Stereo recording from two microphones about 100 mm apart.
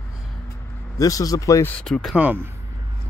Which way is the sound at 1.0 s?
35° left (ahead or behind).